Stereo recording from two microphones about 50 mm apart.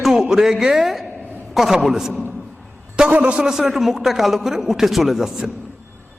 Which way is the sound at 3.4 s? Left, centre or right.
Centre.